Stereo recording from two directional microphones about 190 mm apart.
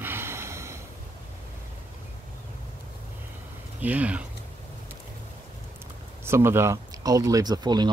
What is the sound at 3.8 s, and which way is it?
Speech, 10° right (ahead or behind).